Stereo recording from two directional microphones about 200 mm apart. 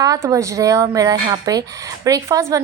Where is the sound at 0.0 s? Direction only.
15° right (ahead or behind).